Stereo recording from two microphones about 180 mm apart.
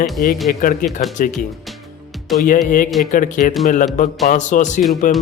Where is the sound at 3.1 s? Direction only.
45° left (ahead or behind).